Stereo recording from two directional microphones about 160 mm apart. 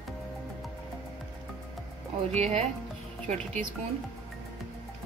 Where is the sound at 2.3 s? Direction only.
45° right (ahead or behind).